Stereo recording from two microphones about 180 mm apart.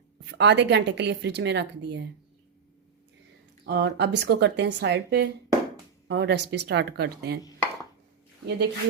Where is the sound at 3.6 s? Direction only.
70° right (ahead or behind).